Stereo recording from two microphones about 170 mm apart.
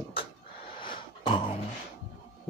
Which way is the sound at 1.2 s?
30° left (ahead or behind).